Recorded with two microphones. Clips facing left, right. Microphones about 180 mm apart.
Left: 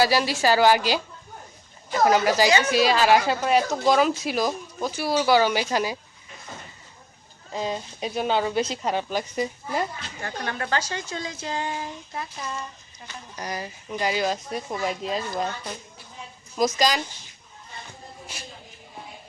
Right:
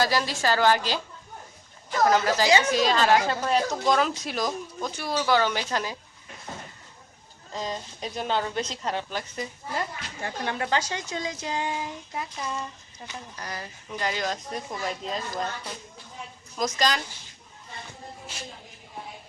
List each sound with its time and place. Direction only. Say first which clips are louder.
0.0 s a woman's voice: left 4 dB; 10° left (ahead or behind)
2.5 s a woman's voice: even; 30° right (ahead or behind)
2.7 s a woman's voice: left 2 dB; 10° left (ahead or behind)
7.5 s a woman's voice: left 4 dB; 5° left (ahead or behind)
10.4 s a child's voice: right 1 dB; 20° right (ahead or behind)
13.3 s a woman's voice: left 9 dB; 15° left (ahead or behind)
16.6 s a woman's voice: left 4 dB; 10° left (ahead or behind)